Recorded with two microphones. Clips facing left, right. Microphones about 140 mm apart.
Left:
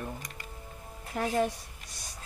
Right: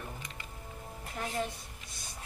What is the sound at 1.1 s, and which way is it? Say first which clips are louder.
Speech: left 7 dB; 65° left (ahead or behind).